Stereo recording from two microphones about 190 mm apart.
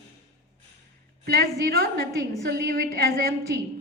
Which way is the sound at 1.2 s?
55° right (ahead or behind).